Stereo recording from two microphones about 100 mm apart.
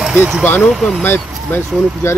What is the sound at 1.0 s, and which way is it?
Speech, 20° left (ahead or behind).